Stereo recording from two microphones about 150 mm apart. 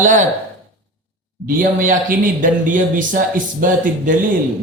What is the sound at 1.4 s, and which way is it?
A man's voice, 70° right (ahead or behind).